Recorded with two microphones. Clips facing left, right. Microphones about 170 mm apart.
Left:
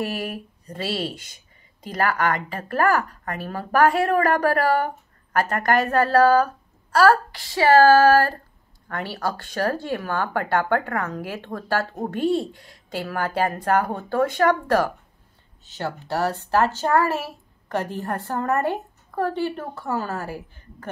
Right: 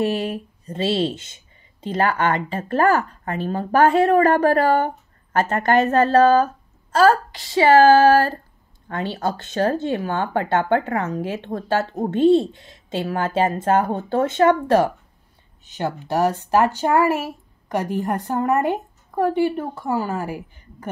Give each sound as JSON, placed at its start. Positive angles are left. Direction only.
{"t": 0.0, "sound": "speech", "side_deg": -25}